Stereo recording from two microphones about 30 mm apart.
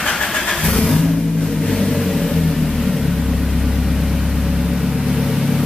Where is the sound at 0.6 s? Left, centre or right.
Centre.